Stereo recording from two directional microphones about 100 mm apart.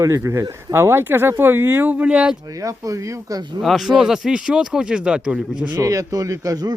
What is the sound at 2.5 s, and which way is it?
Speech, 35° right (ahead or behind).